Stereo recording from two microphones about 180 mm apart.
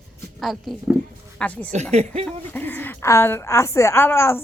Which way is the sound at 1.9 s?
35° right (ahead or behind).